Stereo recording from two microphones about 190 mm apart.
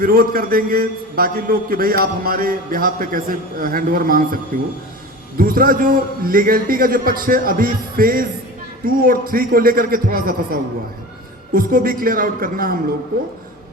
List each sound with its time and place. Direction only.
0.0 s a man's voice: 50° right (ahead or behind)
5.4 s a man's voice: 50° right (ahead or behind)